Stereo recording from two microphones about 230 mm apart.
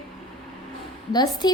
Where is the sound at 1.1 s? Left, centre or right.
Centre.